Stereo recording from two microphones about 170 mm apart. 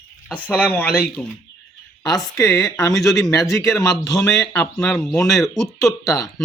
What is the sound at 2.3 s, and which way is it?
Speech, 20° left (ahead or behind).